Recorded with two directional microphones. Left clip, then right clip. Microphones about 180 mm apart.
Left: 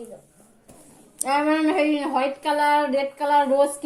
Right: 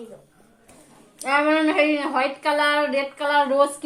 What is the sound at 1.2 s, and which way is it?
Speech, 20° left (ahead or behind).